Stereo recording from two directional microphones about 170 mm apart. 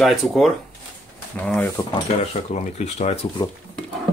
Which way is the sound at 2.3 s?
40° left (ahead or behind).